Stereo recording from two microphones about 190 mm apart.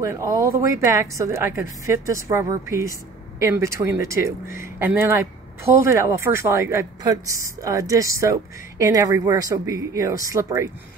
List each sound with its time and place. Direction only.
0.0 s speech: 15° right (ahead or behind)